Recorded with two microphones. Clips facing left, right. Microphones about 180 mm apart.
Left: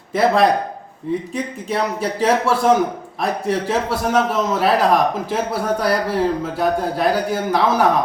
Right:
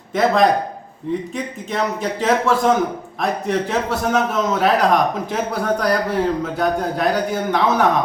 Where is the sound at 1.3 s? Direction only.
10° left (ahead or behind).